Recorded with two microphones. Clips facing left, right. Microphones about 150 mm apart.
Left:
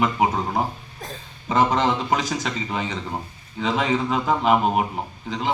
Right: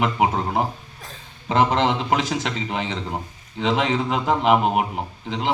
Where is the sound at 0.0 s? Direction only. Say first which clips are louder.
Even; 15° right (ahead or behind).